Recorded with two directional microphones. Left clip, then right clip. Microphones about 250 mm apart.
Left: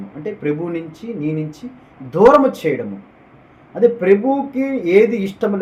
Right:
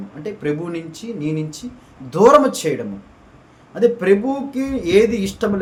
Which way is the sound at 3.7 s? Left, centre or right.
Centre.